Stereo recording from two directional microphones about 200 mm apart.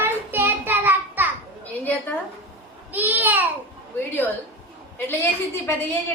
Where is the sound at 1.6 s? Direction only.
10° left (ahead or behind).